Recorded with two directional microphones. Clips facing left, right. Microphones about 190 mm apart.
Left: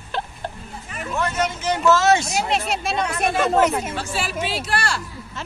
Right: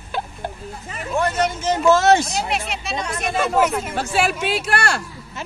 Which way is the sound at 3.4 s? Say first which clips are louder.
Even; centre (ahead or behind).